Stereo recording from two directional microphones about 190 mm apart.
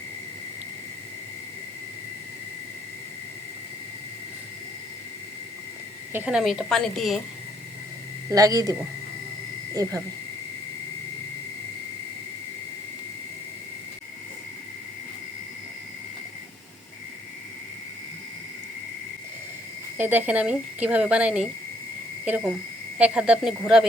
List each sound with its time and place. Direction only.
6.1 s a woman's voice: 5° right (ahead or behind)
8.3 s speech: 20° right (ahead or behind)
9.8 s a woman's voice: 20° right (ahead or behind)
20.0 s a woman's voice: 10° right (ahead or behind)